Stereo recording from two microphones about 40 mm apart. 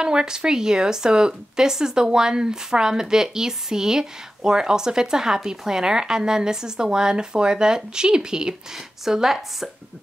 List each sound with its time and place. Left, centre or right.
0.0 s speech: centre